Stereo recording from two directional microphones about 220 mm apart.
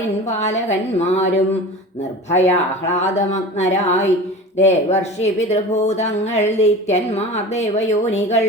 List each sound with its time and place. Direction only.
0.3 s a woman's voice: 30° left (ahead or behind)
2.3 s a woman's voice: 30° left (ahead or behind)